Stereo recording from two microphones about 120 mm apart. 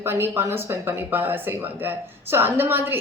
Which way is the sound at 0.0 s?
20° right (ahead or behind).